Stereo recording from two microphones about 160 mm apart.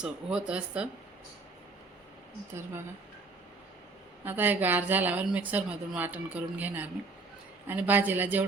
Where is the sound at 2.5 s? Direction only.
15° right (ahead or behind).